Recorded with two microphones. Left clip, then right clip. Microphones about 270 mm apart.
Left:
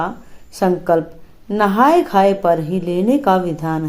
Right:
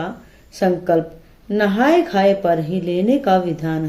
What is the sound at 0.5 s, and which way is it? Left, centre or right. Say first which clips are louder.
A woman's voice: left 1 dB; centre.